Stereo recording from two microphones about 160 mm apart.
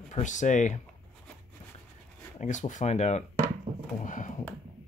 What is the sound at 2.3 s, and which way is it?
Speech, 50° left (ahead or behind).